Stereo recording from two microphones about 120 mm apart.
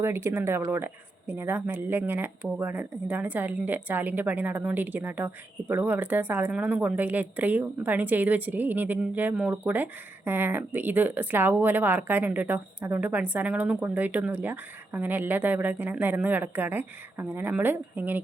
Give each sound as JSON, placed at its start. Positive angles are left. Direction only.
{"t": 0.0, "sound": "a woman's voice", "side_deg": -20}